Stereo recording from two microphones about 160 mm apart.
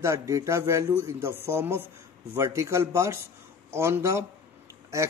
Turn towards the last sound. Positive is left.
turn(degrees=-20)  # may be behind; listen again after turning